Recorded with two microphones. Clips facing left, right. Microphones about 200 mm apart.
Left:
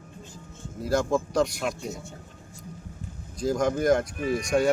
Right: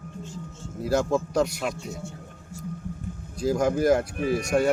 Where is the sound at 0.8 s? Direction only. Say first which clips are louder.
Right 1 dB; 5° right (ahead or behind).